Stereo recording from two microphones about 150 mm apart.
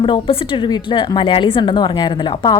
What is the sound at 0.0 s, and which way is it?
Speech, 35° left (ahead or behind).